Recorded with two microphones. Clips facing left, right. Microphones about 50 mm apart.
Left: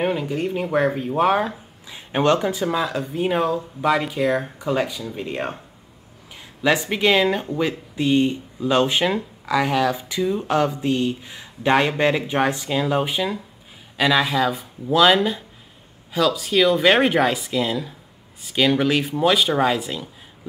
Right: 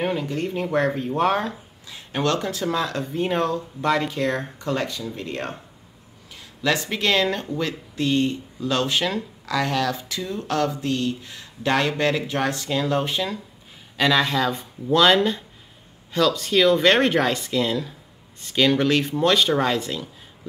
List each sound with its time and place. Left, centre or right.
0.0 s speech: centre
1.9 s speech: left